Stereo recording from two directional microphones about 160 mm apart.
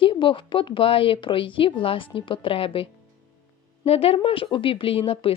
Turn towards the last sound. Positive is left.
turn(degrees=35)  # may be behind; listen again after turning